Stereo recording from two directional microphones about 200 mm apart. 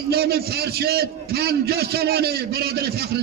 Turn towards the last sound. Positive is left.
turn(degrees=-50)  # may be behind; listen again after turning